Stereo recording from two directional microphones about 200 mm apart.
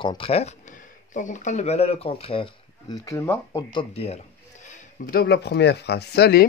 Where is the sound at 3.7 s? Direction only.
25° left (ahead or behind).